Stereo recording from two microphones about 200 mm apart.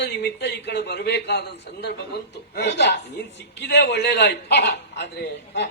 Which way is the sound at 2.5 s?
60° left (ahead or behind).